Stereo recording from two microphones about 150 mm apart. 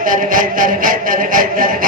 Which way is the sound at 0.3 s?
65° right (ahead or behind).